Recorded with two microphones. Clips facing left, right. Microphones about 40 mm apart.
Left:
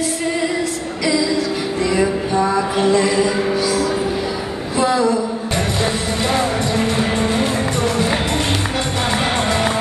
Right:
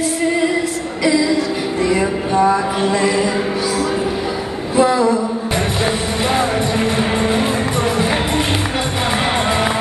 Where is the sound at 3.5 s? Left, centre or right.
Right.